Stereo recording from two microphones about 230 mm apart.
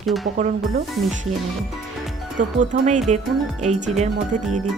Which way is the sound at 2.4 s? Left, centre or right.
Right.